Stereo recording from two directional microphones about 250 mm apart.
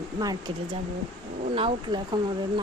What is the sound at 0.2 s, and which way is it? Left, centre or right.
Speech, centre.